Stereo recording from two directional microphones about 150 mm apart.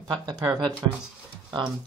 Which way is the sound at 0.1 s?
25° right (ahead or behind).